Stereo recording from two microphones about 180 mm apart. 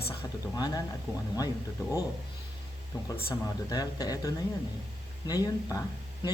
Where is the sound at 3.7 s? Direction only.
20° left (ahead or behind).